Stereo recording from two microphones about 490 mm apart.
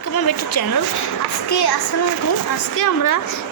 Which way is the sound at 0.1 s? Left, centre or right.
Left.